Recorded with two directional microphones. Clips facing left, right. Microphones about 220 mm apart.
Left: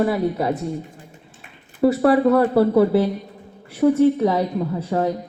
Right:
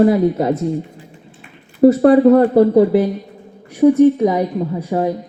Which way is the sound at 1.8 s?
45° right (ahead or behind).